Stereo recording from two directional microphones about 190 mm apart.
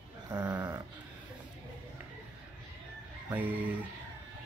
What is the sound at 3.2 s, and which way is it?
Speech, 10° right (ahead or behind).